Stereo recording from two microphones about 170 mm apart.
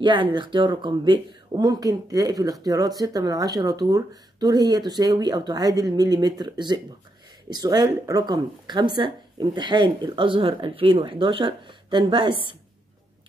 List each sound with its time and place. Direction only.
0.0 s speech: 30° right (ahead or behind)